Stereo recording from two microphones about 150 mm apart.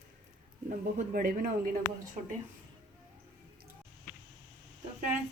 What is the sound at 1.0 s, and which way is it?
Speech, 60° right (ahead or behind).